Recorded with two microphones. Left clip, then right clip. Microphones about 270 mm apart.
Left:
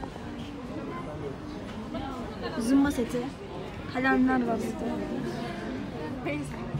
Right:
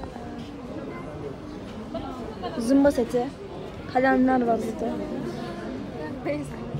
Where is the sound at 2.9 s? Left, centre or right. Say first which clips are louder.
Right 8 dB; centre.